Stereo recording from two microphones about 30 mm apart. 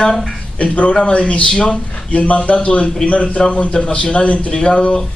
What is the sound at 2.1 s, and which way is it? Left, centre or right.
A man's voice, left.